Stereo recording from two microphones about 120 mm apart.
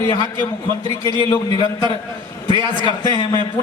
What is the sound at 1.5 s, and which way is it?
Speech, 35° left (ahead or behind).